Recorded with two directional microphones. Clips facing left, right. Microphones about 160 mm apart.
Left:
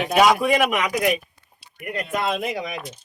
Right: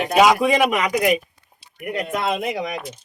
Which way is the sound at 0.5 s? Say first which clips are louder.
Right 2 dB; 20° right (ahead or behind).